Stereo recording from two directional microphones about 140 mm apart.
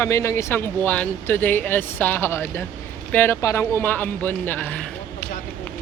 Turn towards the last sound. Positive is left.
turn(degrees=10)  # may be behind; listen again after turning